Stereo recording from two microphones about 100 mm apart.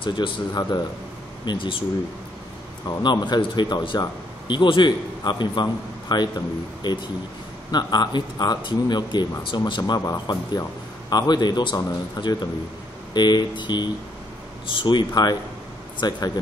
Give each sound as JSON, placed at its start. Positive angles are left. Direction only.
{"t": 0.0, "sound": "speech", "side_deg": 55}
{"t": 1.4, "sound": "speech", "side_deg": 50}
{"t": 3.0, "sound": "a man's voice", "side_deg": 45}